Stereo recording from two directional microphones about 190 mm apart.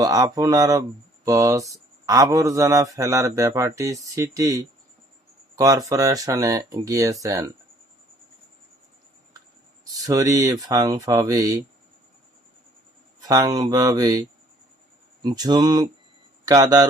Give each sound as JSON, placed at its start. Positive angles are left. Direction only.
{"t": 0.0, "sound": "speech", "side_deg": -20}
{"t": 10.1, "sound": "speech", "side_deg": -20}
{"t": 13.2, "sound": "speech", "side_deg": -20}